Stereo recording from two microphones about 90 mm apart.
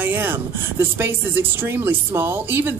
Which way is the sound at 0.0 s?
20° right (ahead or behind).